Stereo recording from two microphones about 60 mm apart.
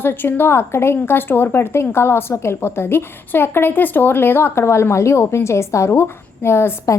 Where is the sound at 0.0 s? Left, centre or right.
Left.